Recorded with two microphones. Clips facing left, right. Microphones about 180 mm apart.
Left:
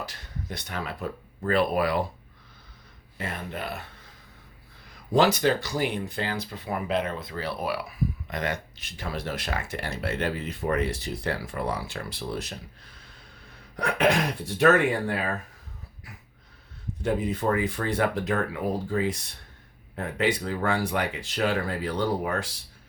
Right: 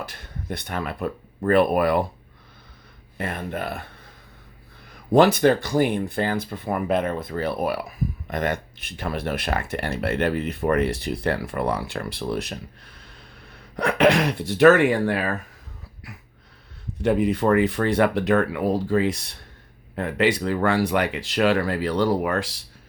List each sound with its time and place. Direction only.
0.0 s speech: 55° right (ahead or behind)
3.2 s speech: 55° right (ahead or behind)
5.1 s speech: 55° right (ahead or behind)
13.7 s speech: 70° right (ahead or behind)
17.0 s speech: 70° right (ahead or behind)